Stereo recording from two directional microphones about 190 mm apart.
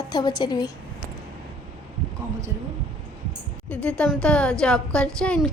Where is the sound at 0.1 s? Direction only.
20° left (ahead or behind).